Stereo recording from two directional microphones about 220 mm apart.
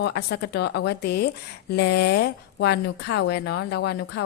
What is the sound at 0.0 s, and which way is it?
Speech, 50° left (ahead or behind).